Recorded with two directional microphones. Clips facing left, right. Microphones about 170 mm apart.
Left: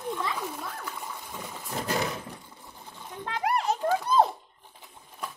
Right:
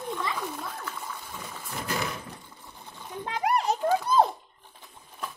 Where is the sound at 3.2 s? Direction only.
15° right (ahead or behind).